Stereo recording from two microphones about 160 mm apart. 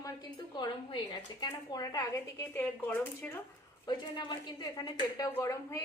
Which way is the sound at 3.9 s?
30° left (ahead or behind).